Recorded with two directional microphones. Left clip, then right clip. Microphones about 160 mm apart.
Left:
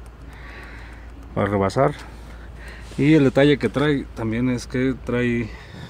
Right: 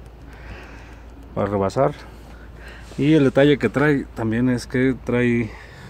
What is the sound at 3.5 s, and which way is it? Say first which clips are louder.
Speech: right 2 dB; 15° right (ahead or behind).